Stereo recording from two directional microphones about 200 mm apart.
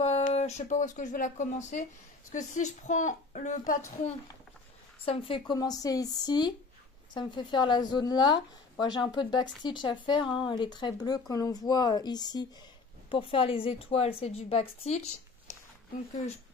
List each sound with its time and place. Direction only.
0.0 s a woman's voice: 30° left (ahead or behind)
5.0 s a woman's voice: 25° left (ahead or behind)